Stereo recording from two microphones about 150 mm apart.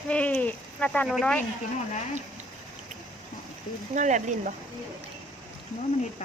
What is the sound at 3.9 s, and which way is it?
Speech, 55° right (ahead or behind).